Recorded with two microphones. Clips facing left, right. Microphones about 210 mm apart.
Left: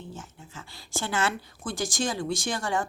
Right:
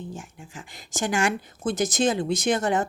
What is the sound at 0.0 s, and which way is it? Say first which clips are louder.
A woman's voice: right 4 dB; 15° right (ahead or behind).